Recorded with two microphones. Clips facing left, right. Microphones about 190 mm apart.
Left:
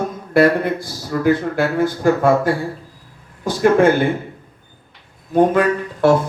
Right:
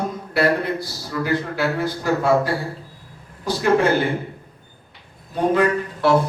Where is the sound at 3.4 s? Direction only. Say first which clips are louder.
Left 5 dB; 50° left (ahead or behind).